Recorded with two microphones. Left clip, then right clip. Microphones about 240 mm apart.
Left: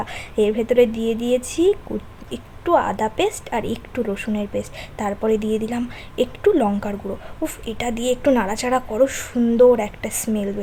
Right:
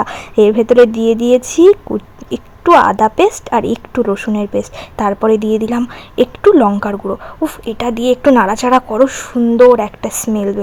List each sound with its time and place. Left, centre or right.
0.0 s speech: right